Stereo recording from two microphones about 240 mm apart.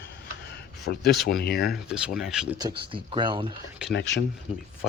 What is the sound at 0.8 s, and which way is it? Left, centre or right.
Speech, left.